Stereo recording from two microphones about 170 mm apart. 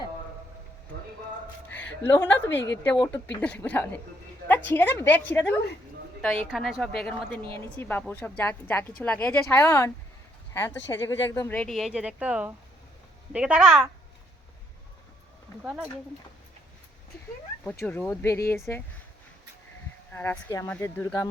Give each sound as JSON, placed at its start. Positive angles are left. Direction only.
{"t": 2.0, "sound": "speech", "side_deg": 10}
{"t": 2.5, "sound": "a woman's voice", "side_deg": 90}
{"t": 3.4, "sound": "speech", "side_deg": 10}
{"t": 6.5, "sound": "speech", "side_deg": 0}
{"t": 15.6, "sound": "speech", "side_deg": -5}
{"t": 17.6, "sound": "speech", "side_deg": 10}
{"t": 20.1, "sound": "speech", "side_deg": 10}